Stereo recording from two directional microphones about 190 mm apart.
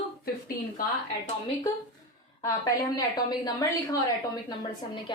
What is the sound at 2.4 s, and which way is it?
A woman's voice, 20° left (ahead or behind).